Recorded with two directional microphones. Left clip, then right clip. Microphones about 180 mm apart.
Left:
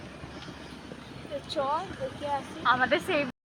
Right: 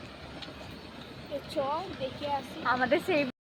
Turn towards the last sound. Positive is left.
turn(degrees=-35)  # may be behind; listen again after turning